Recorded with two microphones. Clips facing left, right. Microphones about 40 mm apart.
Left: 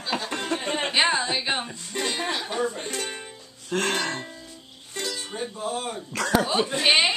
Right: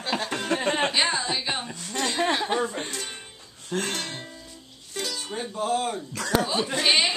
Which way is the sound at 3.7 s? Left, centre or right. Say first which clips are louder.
Left 4 dB; left.